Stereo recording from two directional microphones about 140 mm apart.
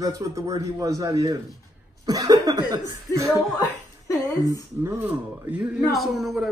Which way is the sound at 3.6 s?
25° left (ahead or behind).